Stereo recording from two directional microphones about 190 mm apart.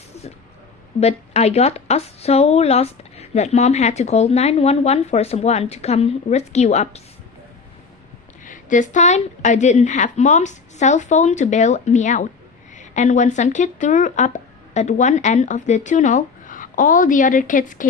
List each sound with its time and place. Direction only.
0.9 s a woman's voice: 35° left (ahead or behind)
8.4 s a woman's voice: 40° left (ahead or behind)